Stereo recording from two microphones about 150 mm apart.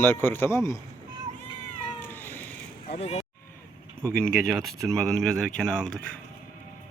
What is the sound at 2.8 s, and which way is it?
Speech, 40° left (ahead or behind).